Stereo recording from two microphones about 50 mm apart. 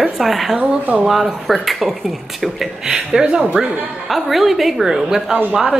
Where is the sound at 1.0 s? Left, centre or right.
Centre.